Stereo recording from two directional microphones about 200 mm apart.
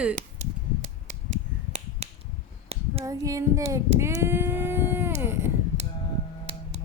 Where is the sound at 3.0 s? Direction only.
15° right (ahead or behind).